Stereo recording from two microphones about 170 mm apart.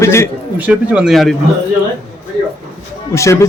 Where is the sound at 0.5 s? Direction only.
10° right (ahead or behind).